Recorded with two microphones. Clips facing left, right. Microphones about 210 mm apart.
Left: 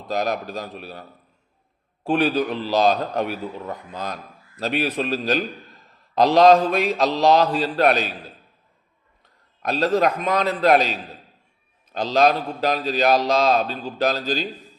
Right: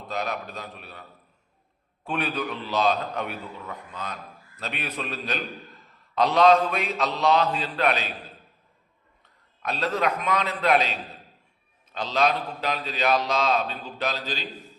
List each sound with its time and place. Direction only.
0.1 s a man's voice: 40° left (ahead or behind)
2.0 s a man's voice: 35° left (ahead or behind)
9.6 s a man's voice: 40° left (ahead or behind)
11.9 s a man's voice: 40° left (ahead or behind)